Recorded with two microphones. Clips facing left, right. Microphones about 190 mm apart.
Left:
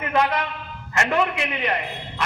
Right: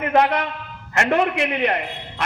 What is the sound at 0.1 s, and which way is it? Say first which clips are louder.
Speech: right 3 dB; 45° right (ahead or behind).